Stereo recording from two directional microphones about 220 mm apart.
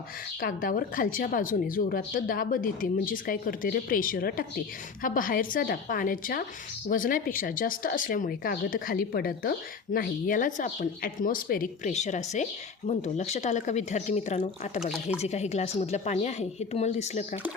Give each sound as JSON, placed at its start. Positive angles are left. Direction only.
{"t": 0.4, "sound": "speech", "side_deg": 40}
{"t": 14.8, "sound": "speech", "side_deg": 0}
{"t": 15.2, "sound": "speech", "side_deg": 30}